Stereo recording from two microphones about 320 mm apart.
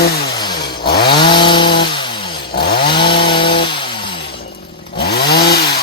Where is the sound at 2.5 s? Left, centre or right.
Left.